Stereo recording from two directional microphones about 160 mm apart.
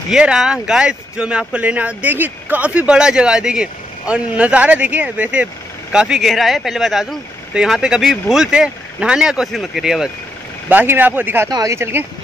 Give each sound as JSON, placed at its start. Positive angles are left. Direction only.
{"t": 0.1, "sound": "speech", "side_deg": -5}